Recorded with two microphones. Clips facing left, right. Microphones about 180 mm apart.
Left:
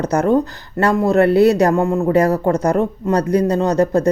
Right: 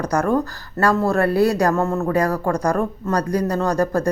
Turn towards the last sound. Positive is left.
turn(degrees=20)  # may be behind; listen again after turning